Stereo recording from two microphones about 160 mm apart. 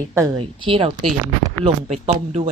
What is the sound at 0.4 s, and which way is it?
A woman's voice, 35° right (ahead or behind).